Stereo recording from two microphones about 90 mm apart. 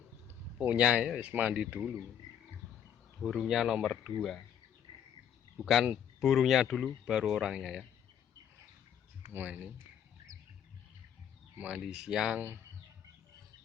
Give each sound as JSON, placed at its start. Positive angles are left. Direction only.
{"t": 0.6, "sound": "speech", "side_deg": -15}
{"t": 3.2, "sound": "speech", "side_deg": 0}
{"t": 5.5, "sound": "speech", "side_deg": 0}
{"t": 9.3, "sound": "speech", "side_deg": -20}
{"t": 11.5, "sound": "speech", "side_deg": -10}